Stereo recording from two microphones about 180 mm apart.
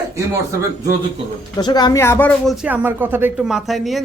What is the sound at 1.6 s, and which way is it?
Speech, 25° left (ahead or behind).